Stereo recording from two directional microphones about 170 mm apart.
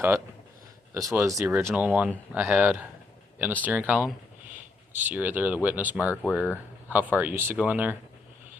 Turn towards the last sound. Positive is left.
turn(degrees=-10)  # may be behind; listen again after turning